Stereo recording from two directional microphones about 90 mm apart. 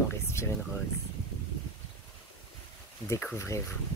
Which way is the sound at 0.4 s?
30° left (ahead or behind).